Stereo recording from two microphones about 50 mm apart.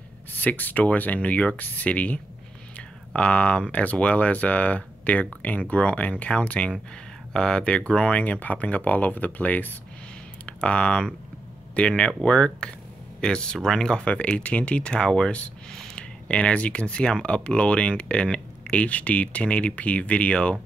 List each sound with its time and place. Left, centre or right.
0.3 s speech: left
10.4 s speech: left
12.1 s speech: centre